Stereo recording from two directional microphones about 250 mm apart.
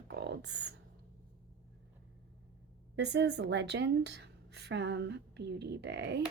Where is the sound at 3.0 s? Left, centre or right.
Right.